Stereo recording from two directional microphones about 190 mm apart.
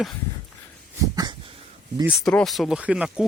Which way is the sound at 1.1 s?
25° right (ahead or behind).